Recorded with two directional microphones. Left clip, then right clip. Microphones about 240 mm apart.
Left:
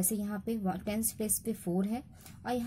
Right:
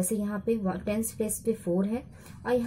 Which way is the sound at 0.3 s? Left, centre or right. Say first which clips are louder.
Right 6 dB; left.